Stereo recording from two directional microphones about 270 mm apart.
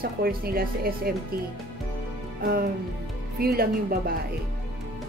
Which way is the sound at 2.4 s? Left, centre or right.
Right.